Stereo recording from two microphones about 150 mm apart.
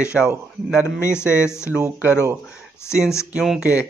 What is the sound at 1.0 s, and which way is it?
Speech, 15° left (ahead or behind).